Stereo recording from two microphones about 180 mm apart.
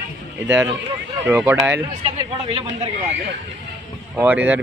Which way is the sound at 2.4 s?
30° right (ahead or behind).